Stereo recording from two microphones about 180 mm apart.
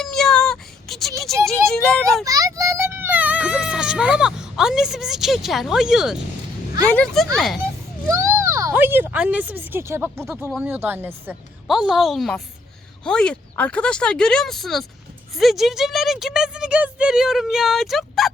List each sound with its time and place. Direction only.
0.0 s a sound: centre (ahead or behind)
1.5 s speech: 5° left (ahead or behind)
2.2 s a child's voice: 20° right (ahead or behind); by 7.6 s centre (ahead or behind)
8.1 s speech: 15° right (ahead or behind); by 18.3 s centre (ahead or behind)